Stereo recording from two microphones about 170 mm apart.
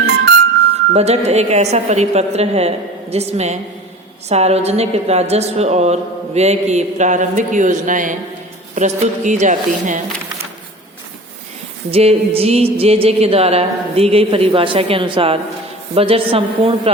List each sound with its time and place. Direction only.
0.9 s a woman's voice: 40° right (ahead or behind)
11.9 s a woman's voice: 35° right (ahead or behind)